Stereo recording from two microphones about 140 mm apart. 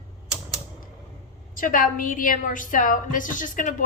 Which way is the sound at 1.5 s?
80° left.